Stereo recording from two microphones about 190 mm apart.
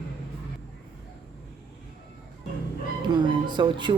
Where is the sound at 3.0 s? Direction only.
25° right (ahead or behind).